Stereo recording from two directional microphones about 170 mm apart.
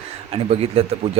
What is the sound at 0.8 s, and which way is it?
Speech, 35° right (ahead or behind).